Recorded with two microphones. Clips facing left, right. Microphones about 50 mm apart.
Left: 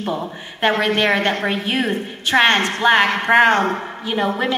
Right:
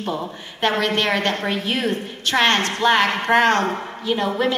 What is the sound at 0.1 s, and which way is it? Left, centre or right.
A woman's voice, centre.